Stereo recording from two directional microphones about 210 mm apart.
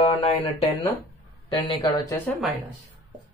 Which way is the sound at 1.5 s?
25° left (ahead or behind).